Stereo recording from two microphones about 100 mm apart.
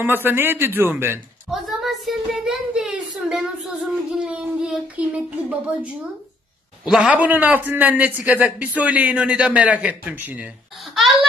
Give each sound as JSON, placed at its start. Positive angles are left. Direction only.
{"t": 0.0, "sound": "speech", "side_deg": -20}
{"t": 1.5, "sound": "a man's voice", "side_deg": 0}
{"t": 7.2, "sound": "a man's voice", "side_deg": -15}